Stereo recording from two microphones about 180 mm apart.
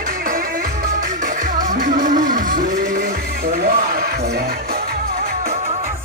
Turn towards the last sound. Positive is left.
turn(degrees=-55)  # may be behind; listen again after turning